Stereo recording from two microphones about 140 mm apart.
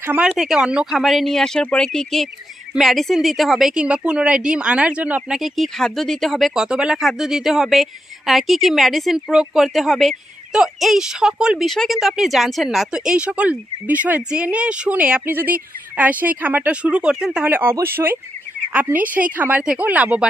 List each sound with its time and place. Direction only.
0.0 s a woman's voice: 15° right (ahead or behind)
5.4 s a woman's voice: 5° left (ahead or behind)